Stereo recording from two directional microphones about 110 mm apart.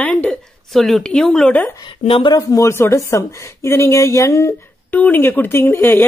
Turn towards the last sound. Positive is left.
turn(degrees=20)  # may be behind; listen again after turning